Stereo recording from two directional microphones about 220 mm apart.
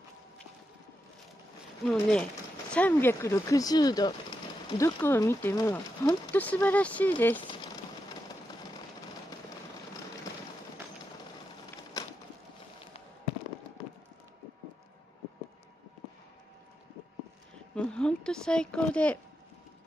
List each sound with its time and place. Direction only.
1.9 s speech: 5° left (ahead or behind)
7.4 s a sound: 20° left (ahead or behind)
17.7 s a woman's voice: 5° left (ahead or behind)